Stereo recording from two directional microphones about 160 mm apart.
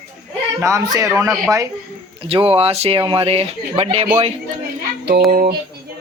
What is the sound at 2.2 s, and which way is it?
Speech, 35° right (ahead or behind).